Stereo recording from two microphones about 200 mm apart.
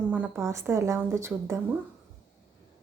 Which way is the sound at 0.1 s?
10° right (ahead or behind).